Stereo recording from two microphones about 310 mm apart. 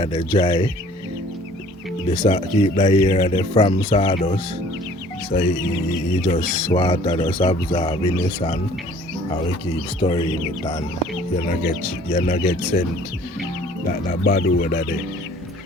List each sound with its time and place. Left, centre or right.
0.0 s speech: centre
2.0 s speech: centre
6.2 s speech: centre
10.0 s speech: centre
12.1 s speech: left
14.1 s speech: left